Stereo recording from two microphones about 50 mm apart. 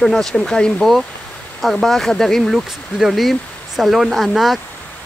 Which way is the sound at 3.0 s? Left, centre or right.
Centre.